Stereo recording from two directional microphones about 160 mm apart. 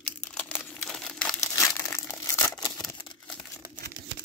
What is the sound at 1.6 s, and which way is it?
Crushing, 15° left (ahead or behind).